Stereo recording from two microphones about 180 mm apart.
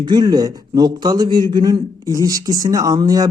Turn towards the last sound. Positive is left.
turn(degrees=-20)  # may be behind; listen again after turning